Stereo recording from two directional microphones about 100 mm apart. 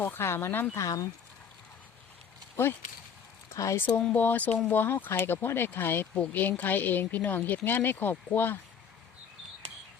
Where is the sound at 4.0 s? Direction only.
15° left (ahead or behind).